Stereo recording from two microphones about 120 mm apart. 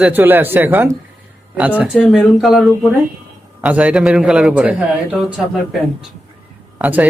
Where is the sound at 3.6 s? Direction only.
10° right (ahead or behind).